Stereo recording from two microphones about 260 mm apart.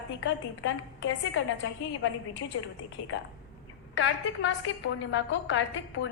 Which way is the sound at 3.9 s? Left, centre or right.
Left.